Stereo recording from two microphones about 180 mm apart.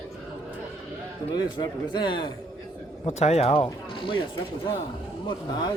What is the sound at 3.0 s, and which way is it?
Speech, 35° left (ahead or behind).